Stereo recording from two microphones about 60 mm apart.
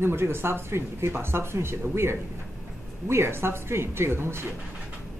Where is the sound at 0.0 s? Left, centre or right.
Right.